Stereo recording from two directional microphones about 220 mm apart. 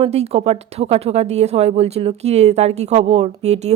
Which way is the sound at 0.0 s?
30° right (ahead or behind).